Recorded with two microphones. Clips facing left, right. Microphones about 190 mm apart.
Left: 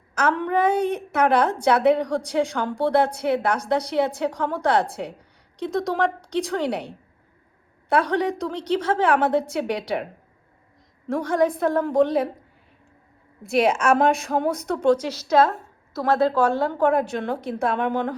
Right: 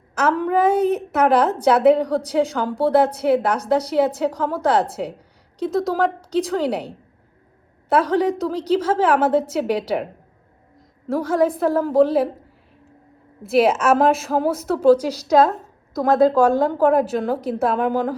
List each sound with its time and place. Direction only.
0.1 s a woman's voice: 5° right (ahead or behind)
11.1 s a woman's voice: centre (ahead or behind)
14.9 s a woman's voice: 35° right (ahead or behind)
15.3 s a woman's voice: 15° right (ahead or behind)
16.6 s a woman's voice: 5° right (ahead or behind)